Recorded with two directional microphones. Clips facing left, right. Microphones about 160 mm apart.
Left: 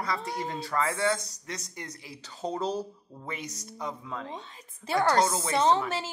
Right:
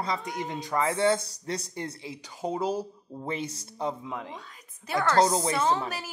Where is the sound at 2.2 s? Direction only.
10° right (ahead or behind).